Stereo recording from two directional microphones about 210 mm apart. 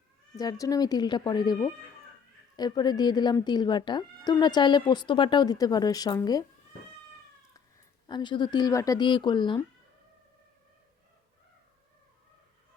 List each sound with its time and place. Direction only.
0.3 s speech: 15° left (ahead or behind)
8.0 s speech: 20° left (ahead or behind)